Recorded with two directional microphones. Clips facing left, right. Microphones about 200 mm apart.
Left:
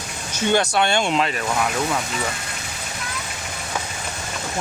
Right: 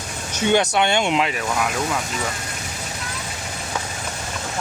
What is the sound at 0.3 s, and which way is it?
Speech, 20° right (ahead or behind).